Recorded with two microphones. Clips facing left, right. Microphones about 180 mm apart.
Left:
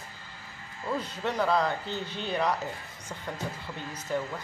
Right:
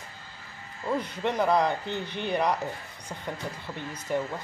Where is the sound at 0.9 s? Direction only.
15° right (ahead or behind).